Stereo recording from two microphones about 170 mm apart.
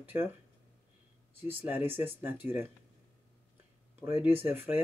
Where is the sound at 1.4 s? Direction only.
10° right (ahead or behind).